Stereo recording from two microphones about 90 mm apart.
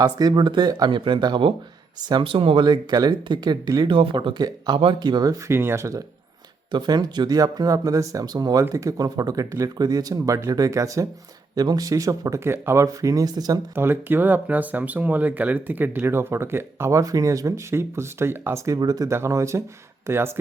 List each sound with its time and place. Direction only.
0.0 s speech: 50° right (ahead or behind)
0.9 s speech: 65° right (ahead or behind)
2.2 s speech: 90° right
2.6 s speech: 50° right (ahead or behind)
3.9 s speech: 70° right (ahead or behind)
4.4 s speech: 45° right (ahead or behind)
4.8 s speech: 65° right (ahead or behind); by 5.4 s 50° right (ahead or behind)
5.5 s speech: 30° right (ahead or behind)
6.7 s speech: 55° right (ahead or behind)
13.7 s speech: 25° right (ahead or behind); by 19.1 s 45° right (ahead or behind)
19.1 s speech: 30° right (ahead or behind)